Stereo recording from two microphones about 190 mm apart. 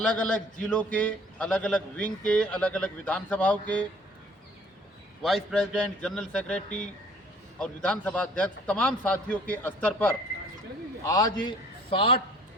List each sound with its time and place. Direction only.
0.0 s a man's voice: 5° left (ahead or behind)
5.2 s a man's voice: centre (ahead or behind)
11.0 s a man's voice: 20° left (ahead or behind)